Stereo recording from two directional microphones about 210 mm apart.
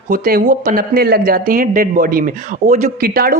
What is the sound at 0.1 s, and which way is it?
Speech, 45° right (ahead or behind).